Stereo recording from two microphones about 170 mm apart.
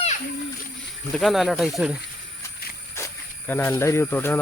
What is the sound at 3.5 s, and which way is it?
Speech, 10° left (ahead or behind).